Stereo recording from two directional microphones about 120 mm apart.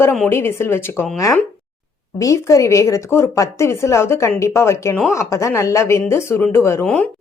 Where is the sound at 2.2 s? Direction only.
25° left (ahead or behind).